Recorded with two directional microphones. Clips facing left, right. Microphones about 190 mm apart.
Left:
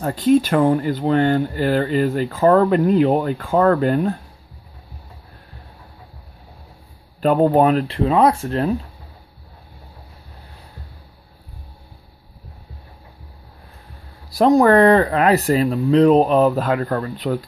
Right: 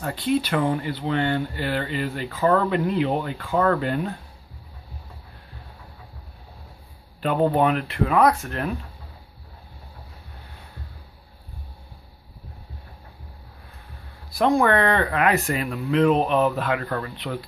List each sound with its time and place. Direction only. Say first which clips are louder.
0.0 s speech: left 8 dB; 40° left (ahead or behind)
7.2 s speech: left 6 dB; 40° left (ahead or behind)
14.3 s speech: left 6 dB; 35° left (ahead or behind)